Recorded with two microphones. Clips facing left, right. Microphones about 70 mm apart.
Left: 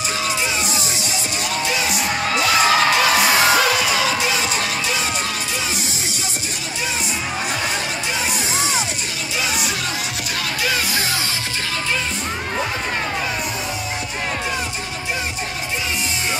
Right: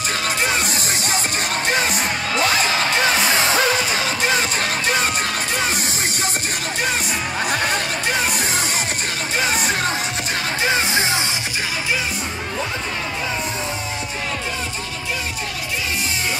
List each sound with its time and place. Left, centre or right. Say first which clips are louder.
1.7 s music: right 2 dB; right
2.6 s music: left 5 dB; left
2.9 s music: left 2 dB; right
7.7 s music: right 2 dB; right
10.6 s music: right 3 dB; right